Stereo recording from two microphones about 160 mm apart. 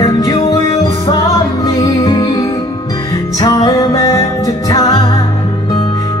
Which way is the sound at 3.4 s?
25° left (ahead or behind).